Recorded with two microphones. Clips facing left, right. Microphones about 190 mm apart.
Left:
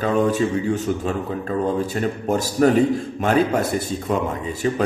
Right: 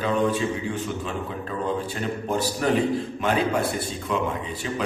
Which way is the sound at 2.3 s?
45° left (ahead or behind).